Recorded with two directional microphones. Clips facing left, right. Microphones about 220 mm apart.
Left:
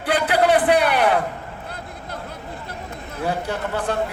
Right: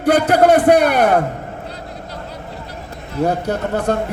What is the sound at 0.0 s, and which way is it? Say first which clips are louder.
A man's voice: right 6 dB; 45° right (ahead or behind).